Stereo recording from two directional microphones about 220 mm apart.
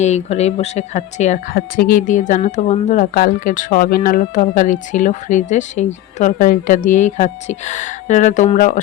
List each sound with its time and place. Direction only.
0.0 s speech: 30° left (ahead or behind)